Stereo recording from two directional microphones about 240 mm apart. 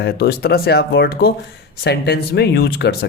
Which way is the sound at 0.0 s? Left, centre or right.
Left.